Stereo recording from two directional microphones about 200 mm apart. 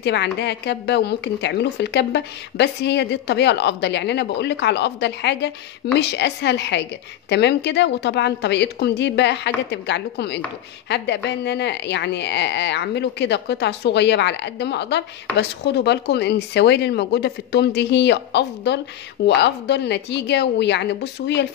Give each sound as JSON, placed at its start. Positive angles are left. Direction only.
{"t": 0.0, "sound": "speech", "side_deg": 60}